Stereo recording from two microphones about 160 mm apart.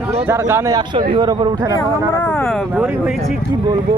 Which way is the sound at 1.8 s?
10° left (ahead or behind).